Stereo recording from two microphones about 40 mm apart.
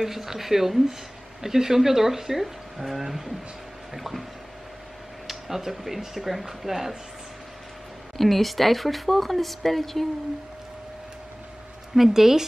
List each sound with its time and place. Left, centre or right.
0.0 s speech: centre
8.2 s speech: centre
11.9 s speech: centre